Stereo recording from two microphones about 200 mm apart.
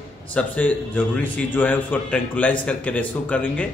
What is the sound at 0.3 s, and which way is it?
A man's voice, 5° left (ahead or behind).